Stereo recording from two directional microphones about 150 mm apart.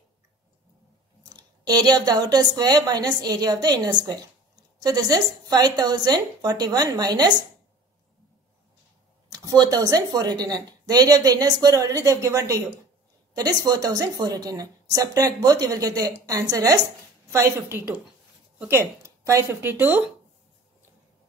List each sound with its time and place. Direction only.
1.3 s a woman's voice: 25° right (ahead or behind)
9.3 s a woman's voice: 25° right (ahead or behind)